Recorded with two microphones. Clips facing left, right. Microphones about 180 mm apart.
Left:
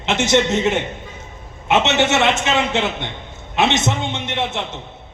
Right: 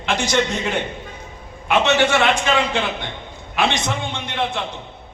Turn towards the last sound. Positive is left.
turn(degrees=25)  # may be behind; listen again after turning